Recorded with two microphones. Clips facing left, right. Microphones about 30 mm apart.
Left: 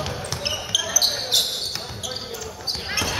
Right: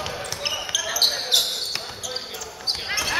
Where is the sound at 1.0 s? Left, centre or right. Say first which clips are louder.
Right 1 dB; centre.